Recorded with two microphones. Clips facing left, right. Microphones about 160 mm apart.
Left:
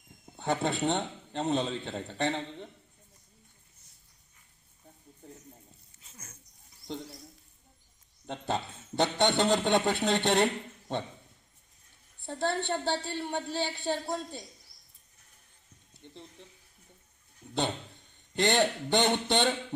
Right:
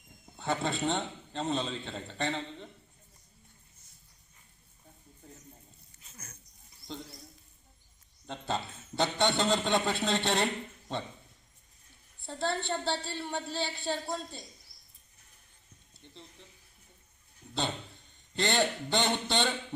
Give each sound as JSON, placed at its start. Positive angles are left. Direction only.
{"t": 0.3, "sound": "a man's voice", "side_deg": 15}
{"t": 8.3, "sound": "a man's voice", "side_deg": 15}
{"t": 12.5, "sound": "a man's voice", "side_deg": 15}
{"t": 16.0, "sound": "a sound", "side_deg": 15}
{"t": 18.3, "sound": "a man's voice", "side_deg": 15}